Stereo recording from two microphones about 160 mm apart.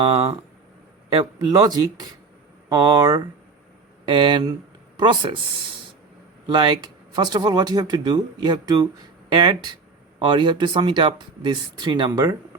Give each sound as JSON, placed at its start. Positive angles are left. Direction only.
{"t": 1.1, "sound": "speech", "side_deg": -25}
{"t": 6.5, "sound": "speech", "side_deg": -30}